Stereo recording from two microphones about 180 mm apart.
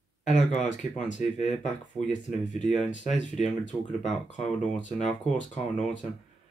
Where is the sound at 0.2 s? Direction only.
40° left (ahead or behind).